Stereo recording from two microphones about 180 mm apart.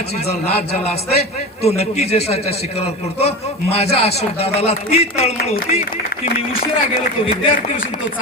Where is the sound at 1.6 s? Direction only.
35° left (ahead or behind).